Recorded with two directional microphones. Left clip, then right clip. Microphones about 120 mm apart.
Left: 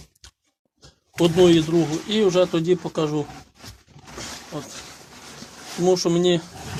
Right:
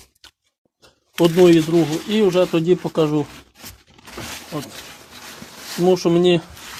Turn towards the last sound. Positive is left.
turn(degrees=-55)  # may be behind; listen again after turning